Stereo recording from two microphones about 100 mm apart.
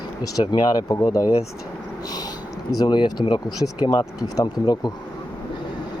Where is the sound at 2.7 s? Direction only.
45° left (ahead or behind).